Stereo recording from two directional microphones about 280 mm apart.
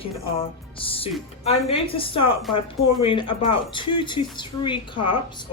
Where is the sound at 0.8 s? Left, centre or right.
Centre.